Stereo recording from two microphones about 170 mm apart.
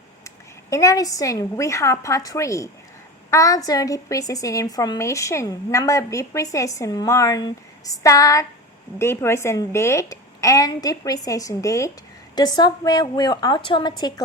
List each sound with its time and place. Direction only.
0.3 s a woman's voice: 20° left (ahead or behind)